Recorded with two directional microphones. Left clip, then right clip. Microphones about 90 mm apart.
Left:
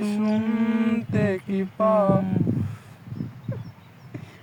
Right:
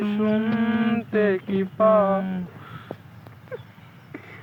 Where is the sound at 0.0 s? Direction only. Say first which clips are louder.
Right 2 dB; 65° left (ahead or behind); by 2.4 s 45° left (ahead or behind).